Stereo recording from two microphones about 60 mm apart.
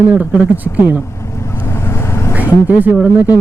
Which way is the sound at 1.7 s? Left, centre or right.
Left.